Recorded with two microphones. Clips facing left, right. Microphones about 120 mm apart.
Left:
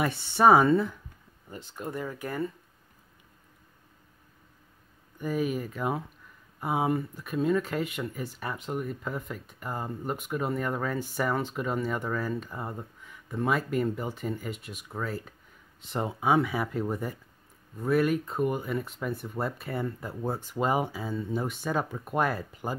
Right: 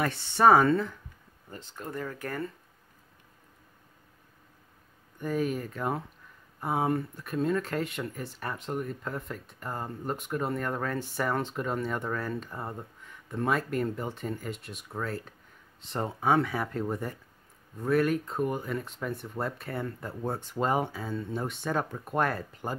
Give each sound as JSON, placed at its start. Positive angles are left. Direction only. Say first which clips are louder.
{"t": 0.0, "sound": "speech", "louder": "even", "side_deg": 10}
{"t": 5.2, "sound": "speech", "louder": "left 1 dB", "side_deg": 5}